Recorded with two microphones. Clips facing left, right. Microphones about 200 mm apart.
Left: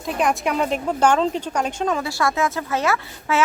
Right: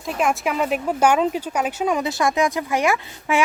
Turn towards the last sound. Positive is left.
turn(degrees=-15)  # may be behind; listen again after turning